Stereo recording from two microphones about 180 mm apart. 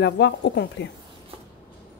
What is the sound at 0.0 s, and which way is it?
Speech, 70° left (ahead or behind).